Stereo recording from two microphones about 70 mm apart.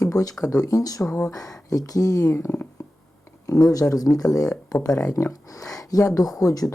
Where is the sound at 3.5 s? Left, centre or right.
Left.